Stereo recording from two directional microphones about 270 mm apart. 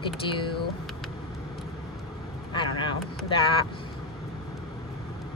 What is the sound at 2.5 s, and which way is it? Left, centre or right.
Speech, centre.